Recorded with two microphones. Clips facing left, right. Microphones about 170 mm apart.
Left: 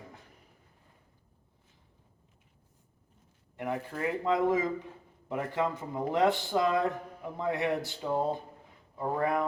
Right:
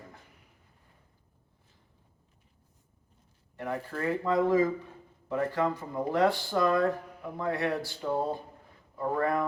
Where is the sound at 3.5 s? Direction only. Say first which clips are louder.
Even; 15° left (ahead or behind).